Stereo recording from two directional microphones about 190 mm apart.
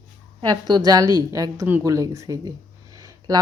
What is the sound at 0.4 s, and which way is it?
A woman's voice, 20° right (ahead or behind).